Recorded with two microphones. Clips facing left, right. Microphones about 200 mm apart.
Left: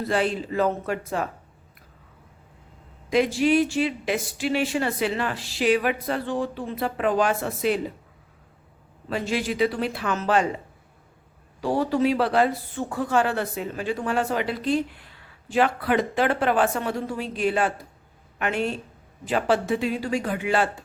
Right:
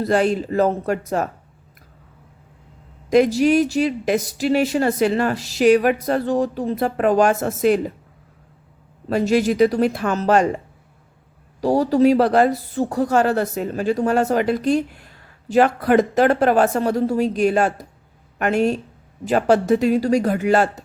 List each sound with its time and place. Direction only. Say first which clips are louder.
0.0 s speech: right 6 dB; 45° right (ahead or behind)
3.1 s speech: right 5 dB; 40° right (ahead or behind)
9.0 s speech: right 9 dB; 45° right (ahead or behind)
11.6 s speech: right 7 dB; 40° right (ahead or behind)